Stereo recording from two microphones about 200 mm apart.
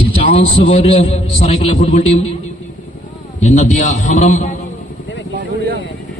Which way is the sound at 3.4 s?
35° left (ahead or behind).